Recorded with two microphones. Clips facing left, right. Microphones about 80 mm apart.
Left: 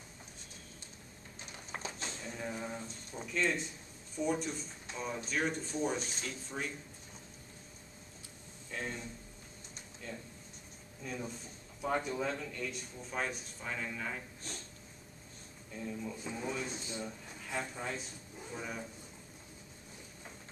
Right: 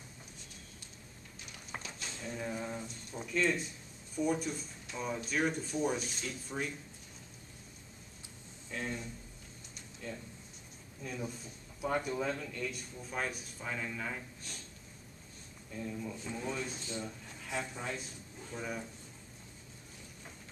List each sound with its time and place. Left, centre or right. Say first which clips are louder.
1.8 s a sound: left 4 dB; left
2.1 s a sound: right 6 dB; centre
3.3 s a man's voice: right 2 dB; centre
8.6 s speech: right 1 dB; centre
10.0 s a man's voice: right 2 dB; centre
15.7 s a man's voice: right 1 dB; centre
17.5 s speech: even; centre
18.6 s a man's voice: right 2 dB; centre